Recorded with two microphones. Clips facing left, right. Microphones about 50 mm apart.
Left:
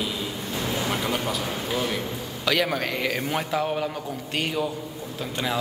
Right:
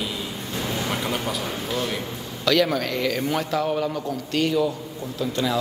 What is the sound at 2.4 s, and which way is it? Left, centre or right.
A man's voice, centre.